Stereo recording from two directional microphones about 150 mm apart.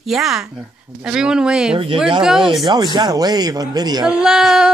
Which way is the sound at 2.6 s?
30° right (ahead or behind).